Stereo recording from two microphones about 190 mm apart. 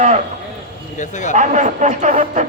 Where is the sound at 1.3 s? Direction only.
40° right (ahead or behind).